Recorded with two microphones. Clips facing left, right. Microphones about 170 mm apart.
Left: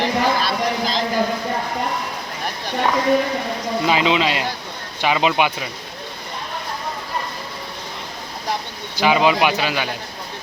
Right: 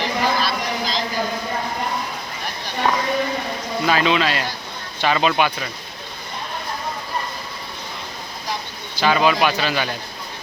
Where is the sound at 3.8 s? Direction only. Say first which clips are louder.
Even; 20° left (ahead or behind).